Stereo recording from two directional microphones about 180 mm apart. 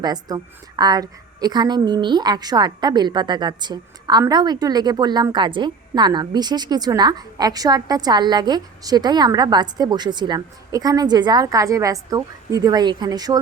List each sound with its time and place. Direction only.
0.0 s a woman's voice: 20° right (ahead or behind)